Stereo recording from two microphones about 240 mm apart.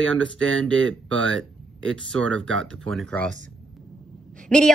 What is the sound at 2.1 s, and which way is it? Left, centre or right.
Speech, right.